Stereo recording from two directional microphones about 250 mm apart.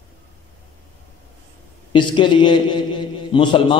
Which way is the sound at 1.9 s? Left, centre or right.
Centre.